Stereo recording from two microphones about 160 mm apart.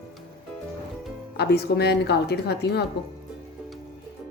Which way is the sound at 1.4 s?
90° left.